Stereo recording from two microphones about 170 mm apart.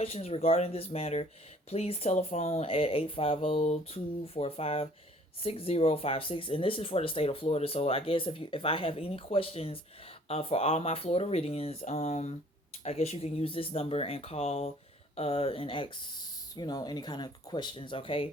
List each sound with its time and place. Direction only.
0.0 s speech: 40° left (ahead or behind)